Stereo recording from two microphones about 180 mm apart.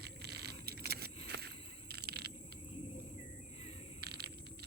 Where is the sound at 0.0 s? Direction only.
65° right (ahead or behind).